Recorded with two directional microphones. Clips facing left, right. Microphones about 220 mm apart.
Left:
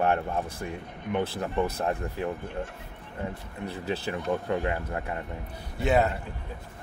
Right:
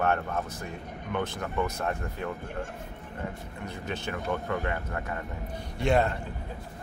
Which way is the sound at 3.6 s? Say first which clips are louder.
Left 4 dB; 35° left (ahead or behind).